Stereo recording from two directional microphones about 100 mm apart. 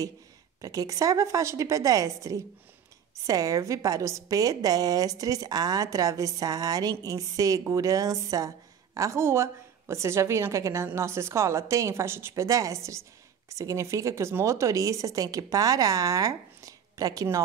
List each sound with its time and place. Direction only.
0.6 s a woman's voice: 35° right (ahead or behind)